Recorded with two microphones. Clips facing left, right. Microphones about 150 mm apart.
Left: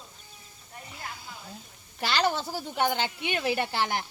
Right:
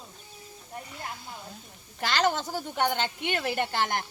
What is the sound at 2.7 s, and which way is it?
Speech, 15° left (ahead or behind).